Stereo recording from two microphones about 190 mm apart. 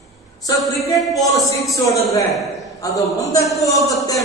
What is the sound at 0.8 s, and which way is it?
A man's voice, 15° left (ahead or behind).